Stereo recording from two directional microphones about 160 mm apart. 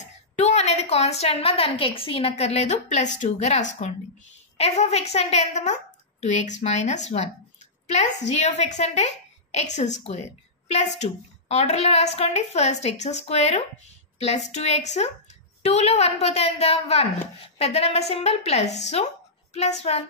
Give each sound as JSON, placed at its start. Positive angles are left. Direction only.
{"t": 0.0, "sound": "a woman's voice", "side_deg": 45}
{"t": 8.3, "sound": "a woman's voice", "side_deg": 45}